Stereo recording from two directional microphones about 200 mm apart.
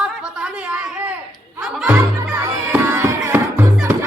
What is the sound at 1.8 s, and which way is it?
Music, 10° right (ahead or behind).